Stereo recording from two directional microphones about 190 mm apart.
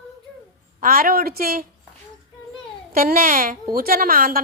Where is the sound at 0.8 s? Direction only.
50° right (ahead or behind).